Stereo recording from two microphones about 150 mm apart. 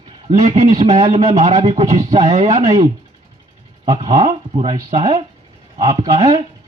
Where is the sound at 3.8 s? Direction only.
35° right (ahead or behind).